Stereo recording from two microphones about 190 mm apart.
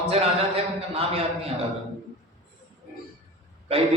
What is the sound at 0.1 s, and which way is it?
Speech, 30° right (ahead or behind).